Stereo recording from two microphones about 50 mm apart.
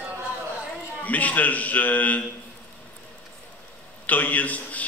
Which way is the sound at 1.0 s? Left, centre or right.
Left.